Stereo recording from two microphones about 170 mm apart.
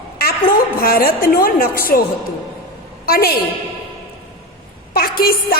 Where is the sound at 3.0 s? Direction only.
65° left (ahead or behind).